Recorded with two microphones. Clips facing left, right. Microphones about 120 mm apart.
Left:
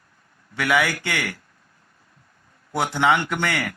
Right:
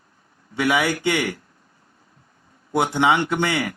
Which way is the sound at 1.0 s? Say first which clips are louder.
Right 6 dB; 20° right (ahead or behind).